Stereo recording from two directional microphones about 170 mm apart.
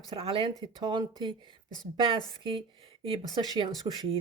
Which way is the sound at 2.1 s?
30° right (ahead or behind).